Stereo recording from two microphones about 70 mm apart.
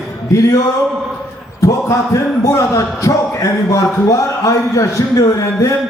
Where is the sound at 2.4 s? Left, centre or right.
Left.